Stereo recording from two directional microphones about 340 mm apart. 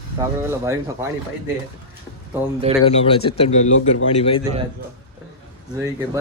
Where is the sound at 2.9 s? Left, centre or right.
Centre.